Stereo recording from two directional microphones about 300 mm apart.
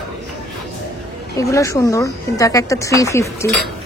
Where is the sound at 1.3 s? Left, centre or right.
Centre.